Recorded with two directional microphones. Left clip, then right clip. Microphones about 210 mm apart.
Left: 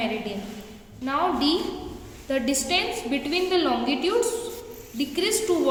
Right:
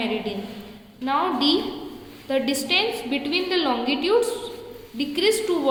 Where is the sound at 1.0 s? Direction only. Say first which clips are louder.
Right 2 dB; 15° right (ahead or behind).